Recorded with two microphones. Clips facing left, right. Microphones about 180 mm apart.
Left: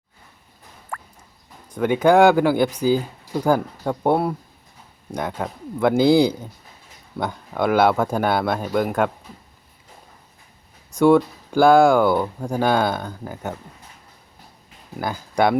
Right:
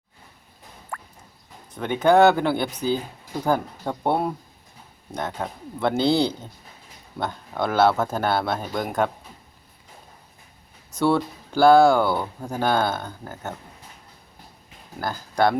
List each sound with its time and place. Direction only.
0.9 s music: 55° left (ahead or behind)
1.7 s speech: 10° left (ahead or behind)
10.9 s speech: 10° left (ahead or behind)